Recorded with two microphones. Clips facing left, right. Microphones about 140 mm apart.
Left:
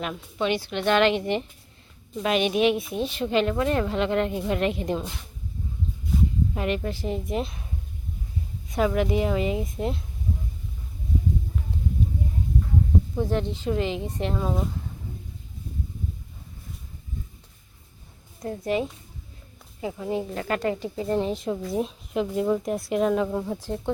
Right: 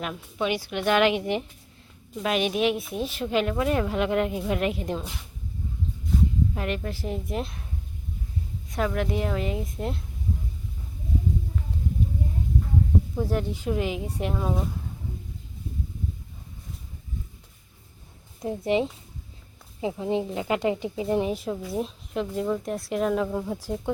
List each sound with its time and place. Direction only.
0.0 s a woman's voice: 5° right (ahead or behind)
6.5 s a woman's voice: 5° left (ahead or behind)
8.7 s a woman's voice: 5° left (ahead or behind)
13.1 s a woman's voice: 5° right (ahead or behind)
18.4 s a woman's voice: 20° right (ahead or behind); by 23.6 s centre (ahead or behind)
23.6 s a woman's voice: 10° right (ahead or behind)